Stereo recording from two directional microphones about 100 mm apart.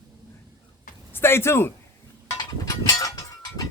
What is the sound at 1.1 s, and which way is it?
Speech, 25° left (ahead or behind).